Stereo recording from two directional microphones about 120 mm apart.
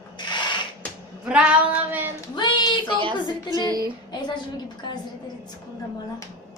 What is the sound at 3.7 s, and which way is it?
Speech, 30° right (ahead or behind).